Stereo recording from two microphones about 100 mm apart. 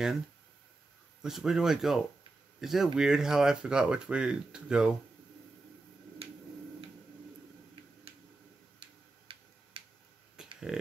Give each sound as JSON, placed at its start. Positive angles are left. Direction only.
{"t": 1.2, "sound": "speech", "side_deg": -5}
{"t": 7.8, "sound": "tick-tock", "side_deg": -60}
{"t": 10.7, "sound": "speech", "side_deg": -5}